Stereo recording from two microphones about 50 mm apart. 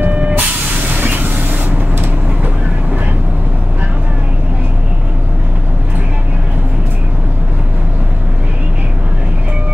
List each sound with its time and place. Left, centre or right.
0.1 s vehicle: right
1.0 s vehicle: right